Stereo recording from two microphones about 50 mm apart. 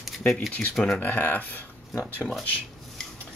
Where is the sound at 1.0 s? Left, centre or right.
Left.